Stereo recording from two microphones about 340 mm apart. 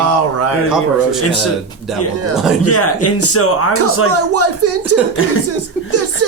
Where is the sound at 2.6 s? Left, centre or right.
Left.